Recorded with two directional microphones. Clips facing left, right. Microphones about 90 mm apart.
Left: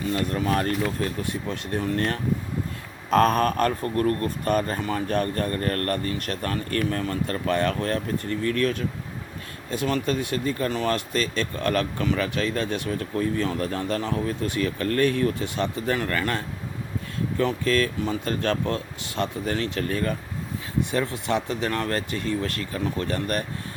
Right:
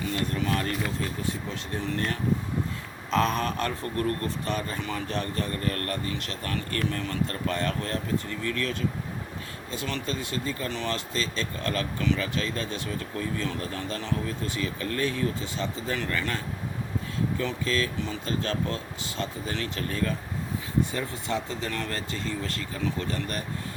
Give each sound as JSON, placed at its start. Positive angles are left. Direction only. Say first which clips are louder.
{"t": 0.1, "sound": "speech", "louder": "left 5 dB", "side_deg": 40}
{"t": 3.9, "sound": "speech", "louder": "left 5 dB", "side_deg": 40}
{"t": 6.5, "sound": "speech", "louder": "left 3 dB", "side_deg": 40}
{"t": 13.4, "sound": "speech", "louder": "left 6 dB", "side_deg": 50}